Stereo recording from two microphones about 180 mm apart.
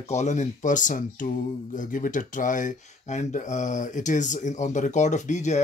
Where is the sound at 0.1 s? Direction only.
40° left (ahead or behind).